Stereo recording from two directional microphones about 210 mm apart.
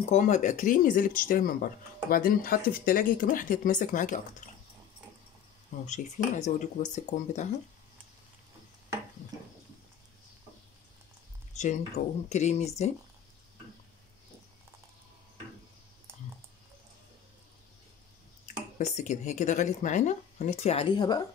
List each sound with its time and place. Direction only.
0.1 s speech: 35° left (ahead or behind)
5.9 s speech: 35° left (ahead or behind)
11.5 s a sound: 35° left (ahead or behind)
12.3 s speech: 35° left (ahead or behind)
18.8 s speech: 35° left (ahead or behind)